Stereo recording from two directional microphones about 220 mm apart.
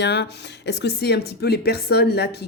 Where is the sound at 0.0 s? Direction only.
50° left (ahead or behind).